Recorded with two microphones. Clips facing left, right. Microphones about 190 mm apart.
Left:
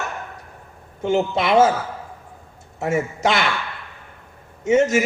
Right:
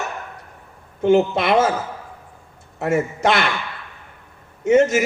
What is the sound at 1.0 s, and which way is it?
Speech, 55° right (ahead or behind).